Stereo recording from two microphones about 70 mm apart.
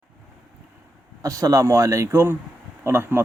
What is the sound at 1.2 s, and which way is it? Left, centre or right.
A man's voice, right.